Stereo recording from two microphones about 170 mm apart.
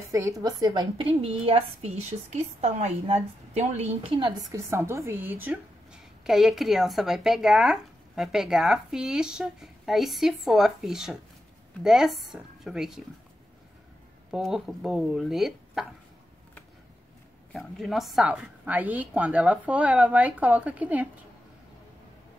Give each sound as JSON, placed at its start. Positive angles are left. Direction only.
{"t": 0.1, "sound": "a woman's voice", "side_deg": -20}
{"t": 14.3, "sound": "a woman's voice", "side_deg": 0}
{"t": 17.5, "sound": "a woman's voice", "side_deg": 0}